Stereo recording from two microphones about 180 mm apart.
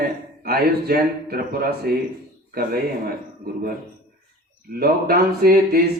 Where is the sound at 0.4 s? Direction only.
60° right (ahead or behind).